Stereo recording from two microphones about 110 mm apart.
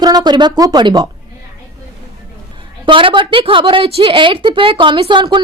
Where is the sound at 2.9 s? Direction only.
50° right (ahead or behind).